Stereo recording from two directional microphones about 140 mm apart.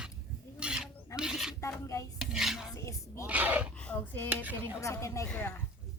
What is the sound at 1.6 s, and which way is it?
Speech, 20° left (ahead or behind).